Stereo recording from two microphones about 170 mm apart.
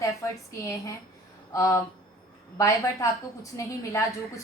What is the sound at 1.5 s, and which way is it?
A woman's voice, 20° left (ahead or behind).